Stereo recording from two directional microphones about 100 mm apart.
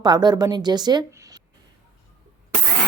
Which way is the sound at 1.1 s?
35° right (ahead or behind).